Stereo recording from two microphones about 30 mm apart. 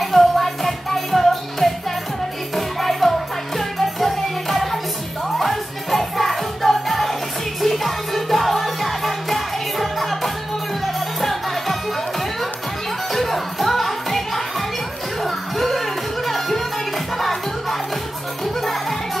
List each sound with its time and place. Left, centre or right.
0.0 s music: centre
13.1 s music: centre